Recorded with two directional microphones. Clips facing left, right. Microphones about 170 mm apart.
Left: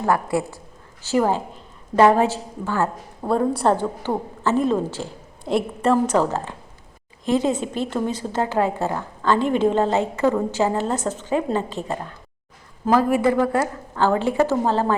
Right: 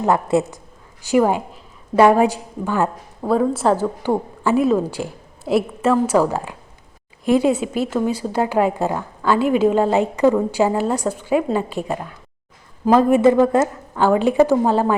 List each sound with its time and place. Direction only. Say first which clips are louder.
0.0 s a woman's voice: right 4 dB; 20° right (ahead or behind)
3.2 s a woman's voice: right 2 dB; centre (ahead or behind)